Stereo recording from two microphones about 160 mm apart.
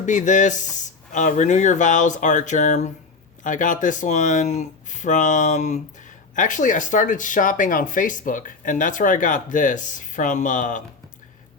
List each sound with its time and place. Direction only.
0.0 s speech: 50° left (ahead or behind)